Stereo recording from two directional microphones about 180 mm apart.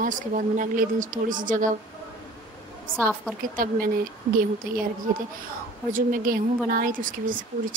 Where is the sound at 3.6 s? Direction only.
50° right (ahead or behind).